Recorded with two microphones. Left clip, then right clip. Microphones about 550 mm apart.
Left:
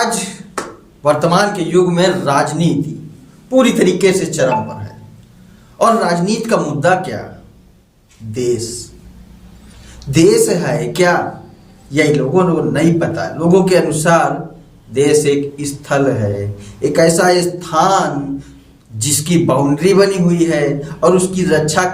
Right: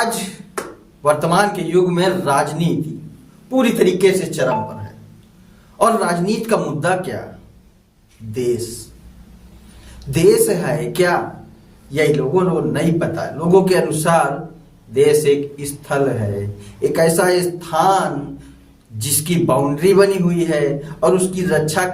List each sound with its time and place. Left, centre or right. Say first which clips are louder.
0.0 s a sound: left 3 dB; right
1.0 s a man's voice: left 3 dB; right
5.8 s a man's voice: left 3 dB; right
8.3 s a man's voice: left 3 dB; right
10.1 s a man's voice: left 3 dB; right